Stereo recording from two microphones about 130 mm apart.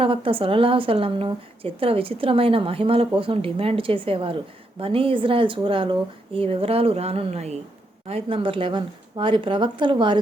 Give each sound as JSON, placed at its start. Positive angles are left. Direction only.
{"t": 0.0, "sound": "a woman's voice", "side_deg": -45}